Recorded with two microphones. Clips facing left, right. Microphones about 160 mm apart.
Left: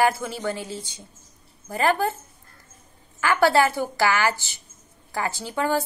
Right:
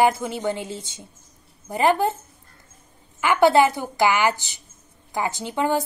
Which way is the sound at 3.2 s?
20° right (ahead or behind).